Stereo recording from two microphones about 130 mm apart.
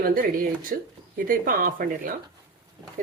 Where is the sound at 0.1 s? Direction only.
90° right.